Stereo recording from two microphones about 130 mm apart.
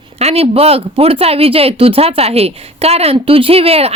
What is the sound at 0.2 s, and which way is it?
Speech, 50° right (ahead or behind).